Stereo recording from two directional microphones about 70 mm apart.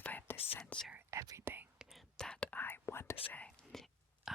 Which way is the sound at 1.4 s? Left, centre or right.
Right.